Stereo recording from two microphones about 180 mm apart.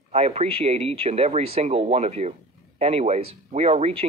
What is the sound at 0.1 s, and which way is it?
Speech, 35° right (ahead or behind).